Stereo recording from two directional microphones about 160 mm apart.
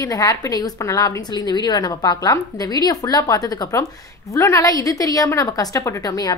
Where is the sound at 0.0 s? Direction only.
20° left (ahead or behind).